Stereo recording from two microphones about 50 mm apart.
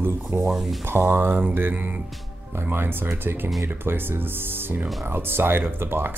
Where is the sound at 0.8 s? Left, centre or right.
Right.